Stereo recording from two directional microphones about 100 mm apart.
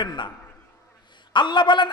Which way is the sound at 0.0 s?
50° left (ahead or behind).